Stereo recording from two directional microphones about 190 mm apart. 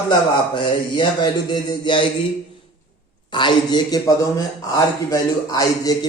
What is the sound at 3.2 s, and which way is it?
A man's voice, 25° left (ahead or behind).